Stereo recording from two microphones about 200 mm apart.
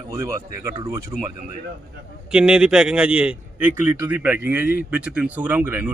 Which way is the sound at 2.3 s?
5° right (ahead or behind).